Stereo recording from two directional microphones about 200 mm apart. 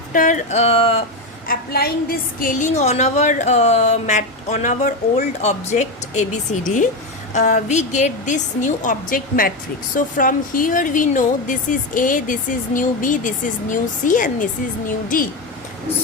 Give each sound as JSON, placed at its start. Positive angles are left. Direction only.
{"t": 0.1, "sound": "a woman's voice", "side_deg": 40}
{"t": 1.5, "sound": "a woman's voice", "side_deg": 50}